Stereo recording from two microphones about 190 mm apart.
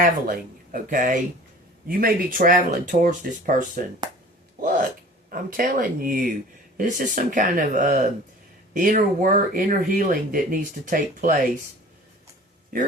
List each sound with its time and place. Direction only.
0.0 s speech: 45° right (ahead or behind)
4.0 s speech: 20° right (ahead or behind)
4.6 s a sound: 45° right (ahead or behind)
5.3 s speech: 50° right (ahead or behind)